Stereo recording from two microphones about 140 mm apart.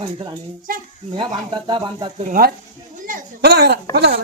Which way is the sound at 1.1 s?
30° right (ahead or behind).